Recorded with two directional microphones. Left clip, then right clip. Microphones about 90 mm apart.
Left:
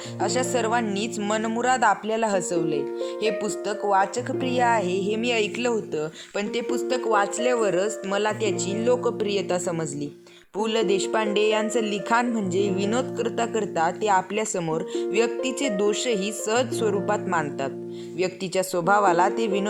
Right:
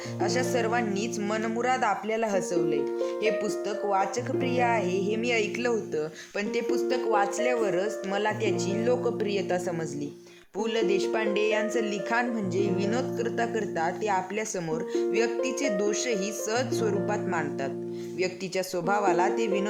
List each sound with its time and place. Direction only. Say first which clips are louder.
0.2 s speech: left 3 dB; 35° left (ahead or behind); by 9.4 s 20° left (ahead or behind)
10.6 s speech: left 3 dB; 40° left (ahead or behind)